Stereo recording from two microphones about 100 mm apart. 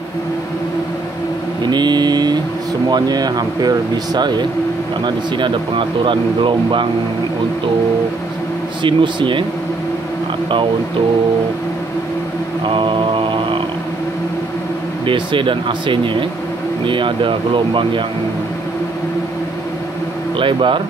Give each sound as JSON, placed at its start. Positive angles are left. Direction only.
{"t": 1.7, "sound": "vehicle", "side_deg": -45}
{"t": 2.9, "sound": "speech", "side_deg": -40}
{"t": 8.8, "sound": "speech", "side_deg": -55}
{"t": 12.6, "sound": "mantra", "side_deg": -55}
{"t": 15.0, "sound": "speech", "side_deg": -55}
{"t": 20.3, "sound": "speech", "side_deg": -55}